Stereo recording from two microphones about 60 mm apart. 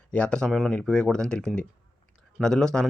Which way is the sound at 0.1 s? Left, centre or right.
Centre.